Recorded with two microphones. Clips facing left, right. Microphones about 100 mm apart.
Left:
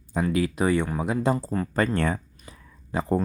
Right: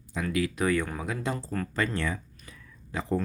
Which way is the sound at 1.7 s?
50° left (ahead or behind).